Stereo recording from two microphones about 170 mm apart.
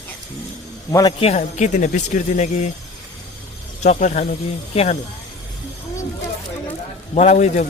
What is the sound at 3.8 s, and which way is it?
A man's voice, 45° left (ahead or behind).